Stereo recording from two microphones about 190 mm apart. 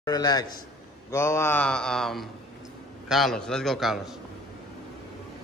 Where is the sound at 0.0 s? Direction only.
20° left (ahead or behind).